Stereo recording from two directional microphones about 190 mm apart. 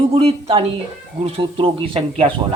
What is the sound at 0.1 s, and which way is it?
Speech, 30° right (ahead or behind).